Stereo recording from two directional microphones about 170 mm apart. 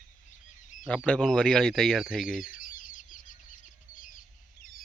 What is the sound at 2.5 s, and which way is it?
Chicken, 50° left (ahead or behind).